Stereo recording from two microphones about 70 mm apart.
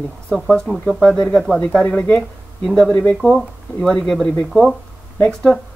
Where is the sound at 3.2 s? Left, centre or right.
Centre.